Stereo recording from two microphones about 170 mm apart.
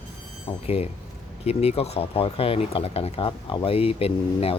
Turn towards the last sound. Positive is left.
turn(degrees=35)  # may be behind; listen again after turning